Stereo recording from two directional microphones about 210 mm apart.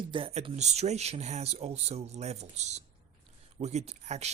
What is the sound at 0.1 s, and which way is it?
Speech, 25° right (ahead or behind).